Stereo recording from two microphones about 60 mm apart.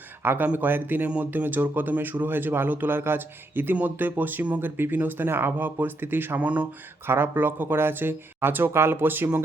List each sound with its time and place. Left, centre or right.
0.2 s speech: right
7.1 s speech: right